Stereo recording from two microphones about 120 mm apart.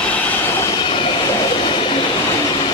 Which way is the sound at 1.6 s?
50° left (ahead or behind).